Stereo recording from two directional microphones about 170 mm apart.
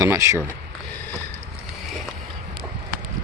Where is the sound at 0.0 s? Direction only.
15° right (ahead or behind).